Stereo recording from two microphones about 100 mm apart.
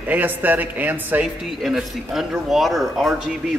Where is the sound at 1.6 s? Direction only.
5° right (ahead or behind).